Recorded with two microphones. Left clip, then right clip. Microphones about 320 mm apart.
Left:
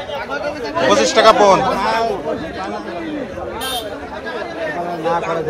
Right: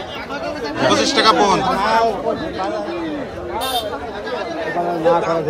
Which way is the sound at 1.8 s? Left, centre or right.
Right.